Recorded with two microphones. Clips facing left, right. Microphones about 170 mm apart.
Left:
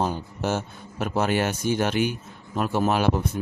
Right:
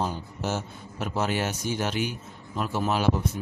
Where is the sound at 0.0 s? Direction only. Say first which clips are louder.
Left 4 dB; 55° left (ahead or behind).